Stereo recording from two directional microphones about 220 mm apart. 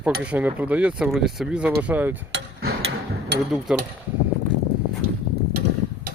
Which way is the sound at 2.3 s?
45° right (ahead or behind).